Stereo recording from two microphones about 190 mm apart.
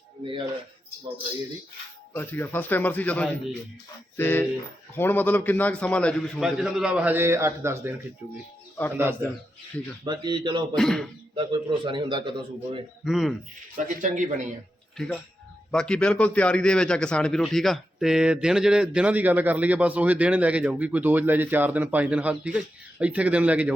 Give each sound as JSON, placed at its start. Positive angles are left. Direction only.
{"t": 2.1, "sound": "a man's voice", "side_deg": 10}
{"t": 10.0, "sound": "a man's voice", "side_deg": -25}
{"t": 10.8, "sound": "a man's voice", "side_deg": 5}
{"t": 11.3, "sound": "a man's voice", "side_deg": -25}
{"t": 13.1, "sound": "a man's voice", "side_deg": 0}
{"t": 13.7, "sound": "speech", "side_deg": -40}
{"t": 14.9, "sound": "a man's voice", "side_deg": 0}